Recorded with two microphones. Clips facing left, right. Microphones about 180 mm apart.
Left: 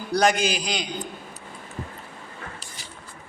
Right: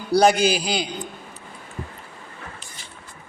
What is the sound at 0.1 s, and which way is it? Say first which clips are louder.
Speech: right 5 dB; 35° right (ahead or behind).